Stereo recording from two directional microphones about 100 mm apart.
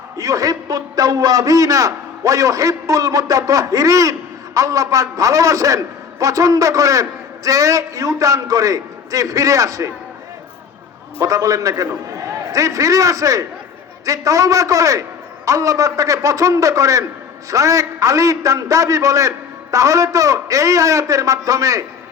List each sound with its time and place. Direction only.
0.2 s a man's voice: 35° right (ahead or behind)
11.2 s a man's voice: 35° right (ahead or behind)